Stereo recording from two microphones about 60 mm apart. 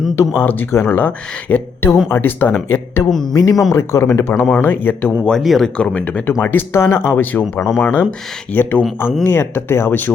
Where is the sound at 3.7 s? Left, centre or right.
Left.